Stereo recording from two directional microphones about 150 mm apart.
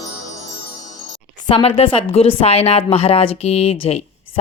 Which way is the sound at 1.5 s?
40° left (ahead or behind).